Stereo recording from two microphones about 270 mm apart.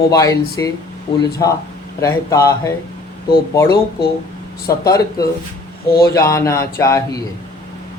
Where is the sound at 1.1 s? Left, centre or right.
Left.